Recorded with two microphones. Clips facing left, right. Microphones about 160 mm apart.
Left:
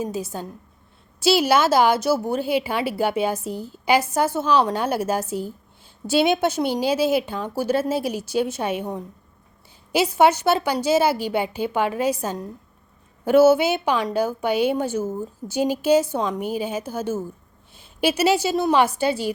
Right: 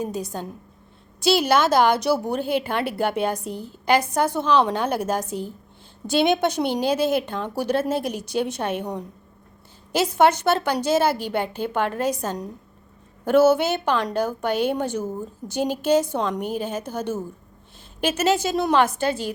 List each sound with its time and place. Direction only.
0.0 s a woman's voice: 5° left (ahead or behind)